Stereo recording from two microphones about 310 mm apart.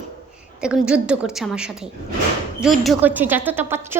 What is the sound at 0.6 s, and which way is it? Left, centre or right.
A woman's voice, centre.